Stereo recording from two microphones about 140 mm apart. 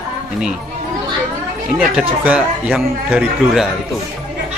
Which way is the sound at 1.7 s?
5° right (ahead or behind).